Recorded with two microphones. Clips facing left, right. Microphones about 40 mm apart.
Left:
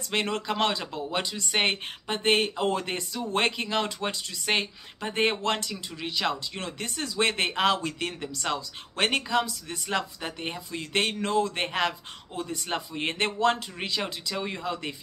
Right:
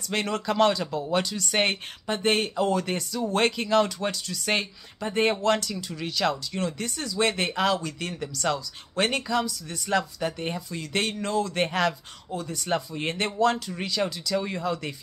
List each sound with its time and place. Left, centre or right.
0.1 s speech: centre
6.6 s speech: left
8.4 s speech: centre
8.9 s speech: left
9.8 s speech: centre
10.8 s speech: left; by 12.4 s centre
12.4 s speech: left